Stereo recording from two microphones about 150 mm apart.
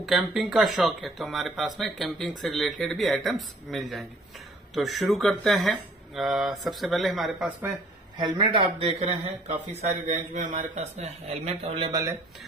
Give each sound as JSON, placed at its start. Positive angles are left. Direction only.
{"t": 0.0, "sound": "speech", "side_deg": 0}
{"t": 8.2, "sound": "a man's voice", "side_deg": -30}
{"t": 11.9, "sound": "speech", "side_deg": -20}